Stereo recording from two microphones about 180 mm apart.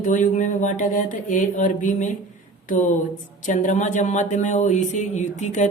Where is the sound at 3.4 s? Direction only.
45° left (ahead or behind).